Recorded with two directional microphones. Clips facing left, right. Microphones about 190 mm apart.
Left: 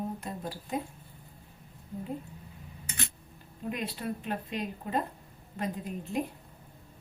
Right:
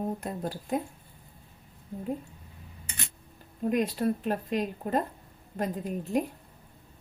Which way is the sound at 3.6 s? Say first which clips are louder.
Right 8 dB; 45° right (ahead or behind).